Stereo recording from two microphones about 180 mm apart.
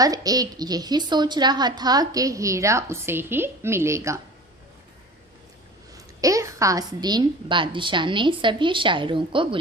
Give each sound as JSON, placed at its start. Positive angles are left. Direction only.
{"t": 0.0, "sound": "a woman's voice", "side_deg": -20}
{"t": 6.2, "sound": "a woman's voice", "side_deg": -20}